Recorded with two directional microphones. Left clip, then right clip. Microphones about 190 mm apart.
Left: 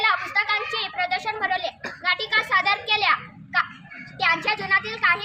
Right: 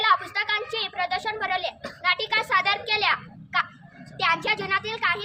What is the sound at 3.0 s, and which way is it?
Children playing, 25° right (ahead or behind).